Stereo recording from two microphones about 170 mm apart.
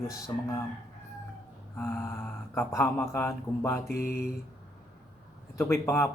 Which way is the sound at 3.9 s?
65° left (ahead or behind).